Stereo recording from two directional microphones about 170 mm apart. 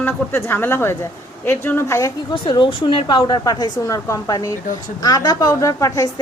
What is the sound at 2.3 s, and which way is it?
A woman's voice, 30° left (ahead or behind).